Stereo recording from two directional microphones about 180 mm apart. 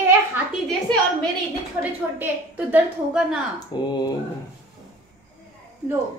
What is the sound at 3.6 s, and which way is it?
Speech, 25° left (ahead or behind).